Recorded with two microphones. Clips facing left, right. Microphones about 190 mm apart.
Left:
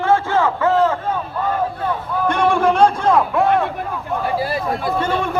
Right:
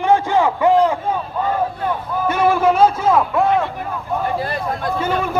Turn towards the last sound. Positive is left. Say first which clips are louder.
# even
turn(degrees=-5)  # may be behind; listen again after turning